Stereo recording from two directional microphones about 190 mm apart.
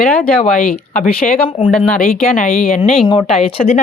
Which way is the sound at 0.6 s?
50° left (ahead or behind).